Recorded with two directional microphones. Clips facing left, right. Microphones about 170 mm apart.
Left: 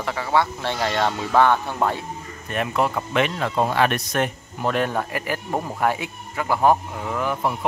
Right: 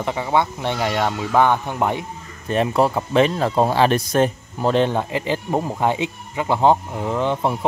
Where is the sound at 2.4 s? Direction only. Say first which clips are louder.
Right 5 dB; 30° right (ahead or behind).